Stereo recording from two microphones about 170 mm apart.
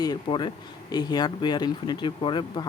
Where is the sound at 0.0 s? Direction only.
25° left (ahead or behind).